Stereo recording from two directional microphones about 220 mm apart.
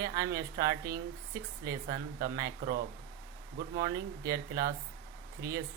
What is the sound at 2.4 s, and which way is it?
Speech, 45° right (ahead or behind).